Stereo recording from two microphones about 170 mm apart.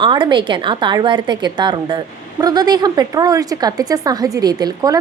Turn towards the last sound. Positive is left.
turn(degrees=-25)  # may be behind; listen again after turning